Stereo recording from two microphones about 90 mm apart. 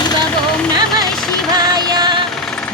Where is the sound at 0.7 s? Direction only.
50° right (ahead or behind).